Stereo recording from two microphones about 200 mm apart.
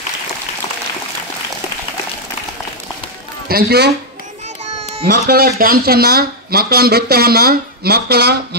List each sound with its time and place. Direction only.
3.4 s a man's voice: 50° right (ahead or behind)
5.0 s speech: 50° right (ahead or behind)